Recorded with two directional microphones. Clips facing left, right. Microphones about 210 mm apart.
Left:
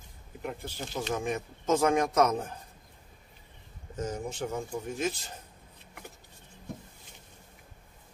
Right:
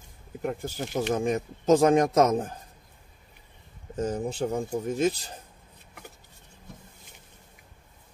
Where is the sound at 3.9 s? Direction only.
35° right (ahead or behind).